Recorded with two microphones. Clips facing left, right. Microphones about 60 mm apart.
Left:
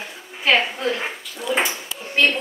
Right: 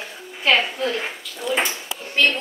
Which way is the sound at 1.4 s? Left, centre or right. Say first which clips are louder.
Left 1 dB; centre.